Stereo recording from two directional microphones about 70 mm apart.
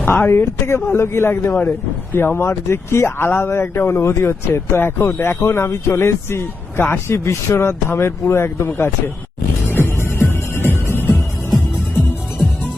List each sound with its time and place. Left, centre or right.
0.0 s speech: left
0.3 s a man's voice: left
9.7 s music: left